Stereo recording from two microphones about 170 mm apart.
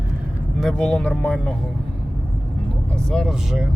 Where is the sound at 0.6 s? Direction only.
5° left (ahead or behind).